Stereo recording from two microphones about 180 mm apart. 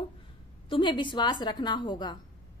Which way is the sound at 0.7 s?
25° left (ahead or behind).